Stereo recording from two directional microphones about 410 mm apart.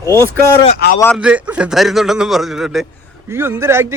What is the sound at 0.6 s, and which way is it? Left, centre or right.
Speech, centre.